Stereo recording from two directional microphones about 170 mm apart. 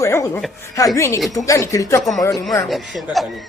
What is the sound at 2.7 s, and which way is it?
Speech, centre (ahead or behind).